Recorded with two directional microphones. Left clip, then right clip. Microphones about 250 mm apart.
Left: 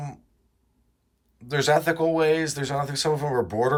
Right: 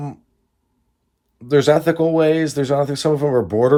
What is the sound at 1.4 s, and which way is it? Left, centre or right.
Speech, right.